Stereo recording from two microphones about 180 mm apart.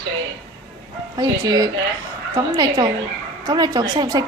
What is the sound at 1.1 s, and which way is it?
A woman's voice, 20° right (ahead or behind).